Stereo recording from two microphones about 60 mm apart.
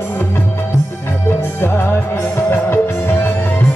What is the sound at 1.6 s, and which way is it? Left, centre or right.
Music, left.